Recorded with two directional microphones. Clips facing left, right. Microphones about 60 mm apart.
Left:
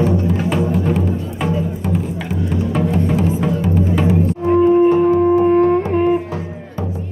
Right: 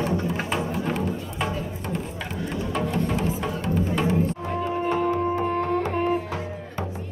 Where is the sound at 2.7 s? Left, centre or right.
Centre.